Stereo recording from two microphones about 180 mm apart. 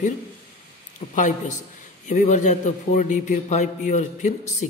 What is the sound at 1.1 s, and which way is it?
A man's voice, 45° left (ahead or behind).